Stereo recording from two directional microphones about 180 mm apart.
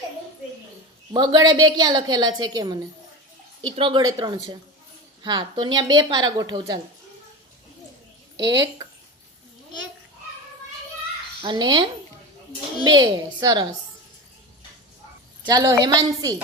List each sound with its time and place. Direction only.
1.1 s a woman's voice: 25° right (ahead or behind)
8.4 s a woman's voice: 20° right (ahead or behind)
11.4 s a woman's voice: 25° right (ahead or behind)
15.4 s a woman's voice: 25° right (ahead or behind)